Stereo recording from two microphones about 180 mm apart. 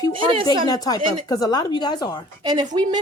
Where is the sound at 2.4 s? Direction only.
20° right (ahead or behind).